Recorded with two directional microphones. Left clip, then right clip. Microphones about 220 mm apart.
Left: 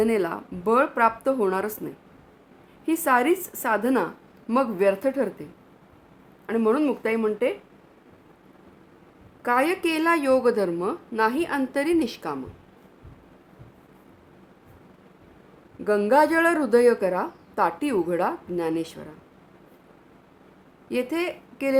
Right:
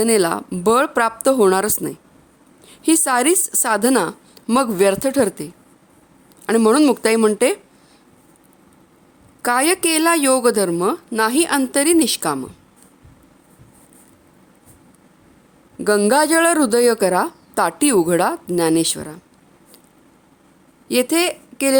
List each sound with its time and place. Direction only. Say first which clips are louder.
0.0 s a woman's voice: right 7 dB; 45° right (ahead or behind)
9.4 s speech: right 5 dB; 45° right (ahead or behind)
15.8 s speech: right 4 dB; 45° right (ahead or behind)
20.8 s speech: right 9 dB; 40° right (ahead or behind)